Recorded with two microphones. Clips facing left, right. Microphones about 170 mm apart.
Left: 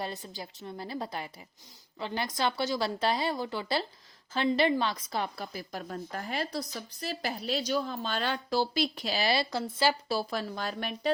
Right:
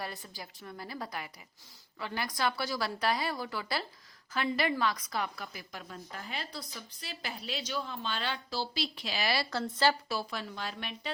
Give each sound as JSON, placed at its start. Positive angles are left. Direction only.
{"t": 0.0, "sound": "a woman's voice", "side_deg": 20}
{"t": 9.5, "sound": "speech", "side_deg": 10}
{"t": 10.1, "sound": "a woman's voice", "side_deg": 35}